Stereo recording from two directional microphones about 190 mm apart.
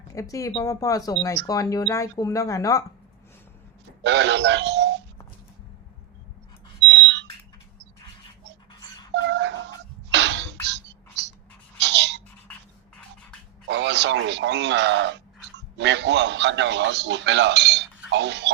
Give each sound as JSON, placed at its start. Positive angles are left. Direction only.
{"t": 0.1, "sound": "speech", "side_deg": 15}
{"t": 4.0, "sound": "speech", "side_deg": -65}
{"t": 6.8, "sound": "smoke detector", "side_deg": -70}
{"t": 9.2, "sound": "music", "side_deg": -65}
{"t": 11.8, "sound": "a sound", "side_deg": -65}
{"t": 13.7, "sound": "speech", "side_deg": -65}